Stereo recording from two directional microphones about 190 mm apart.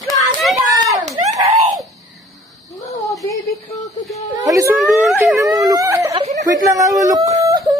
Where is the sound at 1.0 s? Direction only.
40° right (ahead or behind).